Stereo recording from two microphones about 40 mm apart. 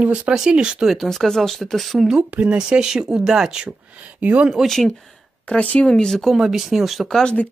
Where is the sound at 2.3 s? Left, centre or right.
Right.